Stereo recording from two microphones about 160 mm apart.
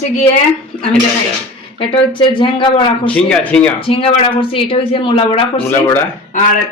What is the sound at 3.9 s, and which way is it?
A woman's voice, 35° left (ahead or behind).